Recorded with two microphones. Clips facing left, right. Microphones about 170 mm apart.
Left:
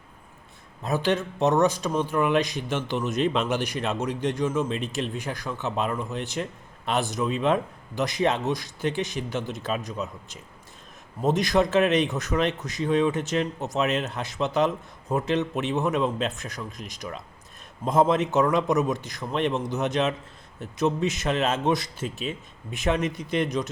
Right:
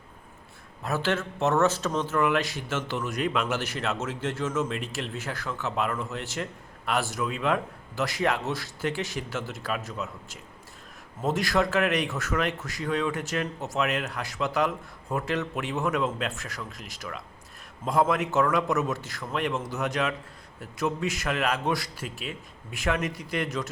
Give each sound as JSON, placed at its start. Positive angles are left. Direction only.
{"t": 0.9, "sound": "speech", "side_deg": 15}